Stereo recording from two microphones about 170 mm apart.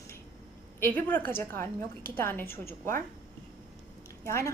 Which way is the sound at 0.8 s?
10° left (ahead or behind).